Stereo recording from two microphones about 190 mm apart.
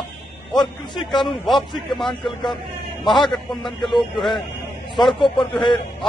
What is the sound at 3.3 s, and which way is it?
Speech, centre (ahead or behind).